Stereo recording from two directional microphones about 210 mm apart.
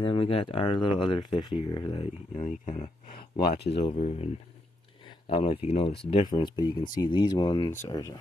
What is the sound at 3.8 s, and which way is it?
Speech, 30° left (ahead or behind).